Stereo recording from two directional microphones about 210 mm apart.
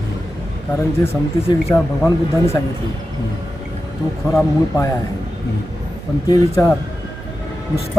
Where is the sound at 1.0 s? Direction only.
10° left (ahead or behind).